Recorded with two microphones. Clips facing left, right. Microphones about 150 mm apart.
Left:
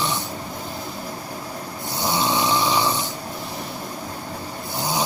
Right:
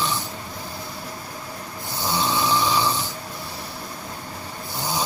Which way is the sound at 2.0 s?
20° left (ahead or behind).